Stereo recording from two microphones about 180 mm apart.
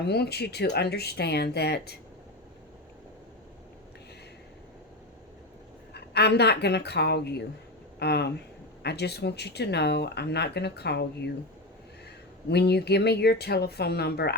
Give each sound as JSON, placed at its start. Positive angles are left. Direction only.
{"t": 0.0, "sound": "speech", "side_deg": 65}
{"t": 5.9, "sound": "speech", "side_deg": 65}
{"t": 12.5, "sound": "speech", "side_deg": 65}